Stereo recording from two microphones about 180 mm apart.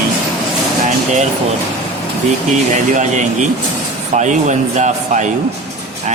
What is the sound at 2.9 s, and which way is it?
A man's voice, 40° right (ahead or behind).